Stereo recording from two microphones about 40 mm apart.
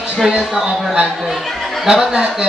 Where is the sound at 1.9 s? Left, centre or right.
Centre.